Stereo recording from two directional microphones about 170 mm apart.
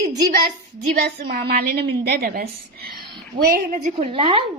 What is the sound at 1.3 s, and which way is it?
A woman's voice, 75° right (ahead or behind).